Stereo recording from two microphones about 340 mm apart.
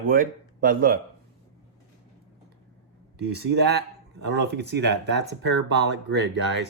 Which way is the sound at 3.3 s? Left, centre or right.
Right.